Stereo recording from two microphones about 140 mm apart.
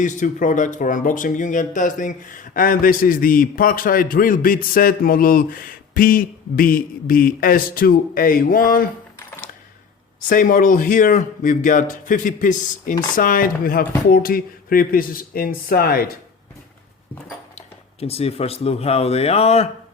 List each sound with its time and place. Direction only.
0.0 s speech: 65° left (ahead or behind); by 8.9 s 90° left
10.2 s speech: 75° left (ahead or behind); by 16.0 s 90° left
18.0 s speech: 45° left (ahead or behind)